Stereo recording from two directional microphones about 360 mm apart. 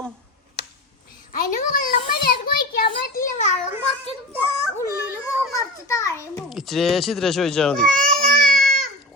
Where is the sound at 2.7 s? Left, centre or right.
Left.